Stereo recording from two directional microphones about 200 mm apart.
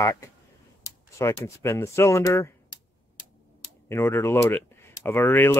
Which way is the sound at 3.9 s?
10° left (ahead or behind).